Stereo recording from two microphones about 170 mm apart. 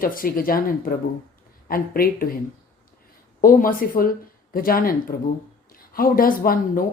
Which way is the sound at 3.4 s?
55° left (ahead or behind).